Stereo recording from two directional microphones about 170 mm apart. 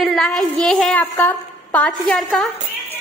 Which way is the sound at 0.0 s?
Centre (ahead or behind).